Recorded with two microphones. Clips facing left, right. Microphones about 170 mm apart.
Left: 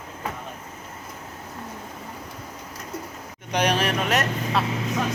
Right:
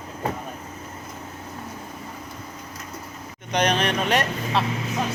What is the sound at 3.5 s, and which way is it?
A man's voice, 10° left (ahead or behind).